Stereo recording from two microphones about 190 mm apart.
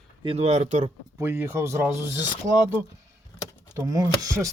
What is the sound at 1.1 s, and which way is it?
Speech, 10° right (ahead or behind).